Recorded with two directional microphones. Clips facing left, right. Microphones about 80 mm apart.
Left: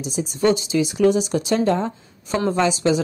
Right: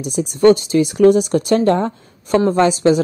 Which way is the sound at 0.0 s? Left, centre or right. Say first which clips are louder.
Right 7 dB; right.